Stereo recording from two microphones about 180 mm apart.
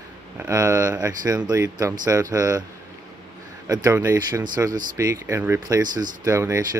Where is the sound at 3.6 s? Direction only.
15° right (ahead or behind).